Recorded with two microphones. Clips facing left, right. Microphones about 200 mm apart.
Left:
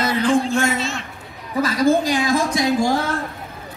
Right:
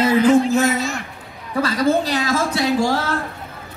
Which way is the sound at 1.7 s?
10° left (ahead or behind).